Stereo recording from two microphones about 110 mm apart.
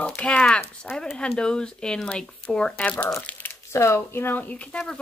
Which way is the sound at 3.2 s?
15° left (ahead or behind).